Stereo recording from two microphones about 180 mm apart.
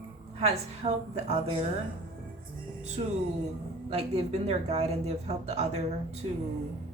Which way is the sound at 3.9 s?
35° right (ahead or behind).